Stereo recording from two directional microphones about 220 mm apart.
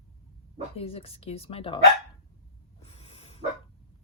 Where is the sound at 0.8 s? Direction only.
25° left (ahead or behind).